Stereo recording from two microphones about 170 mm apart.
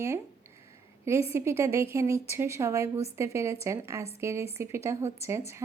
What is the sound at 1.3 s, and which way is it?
A woman's voice, 15° right (ahead or behind).